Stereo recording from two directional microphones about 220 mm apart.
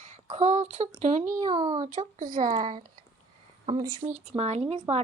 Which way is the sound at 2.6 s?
20° right (ahead or behind).